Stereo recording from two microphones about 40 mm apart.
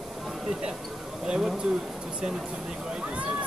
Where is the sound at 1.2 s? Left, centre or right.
Right.